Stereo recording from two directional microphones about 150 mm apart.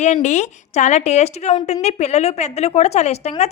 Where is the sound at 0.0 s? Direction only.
50° left (ahead or behind).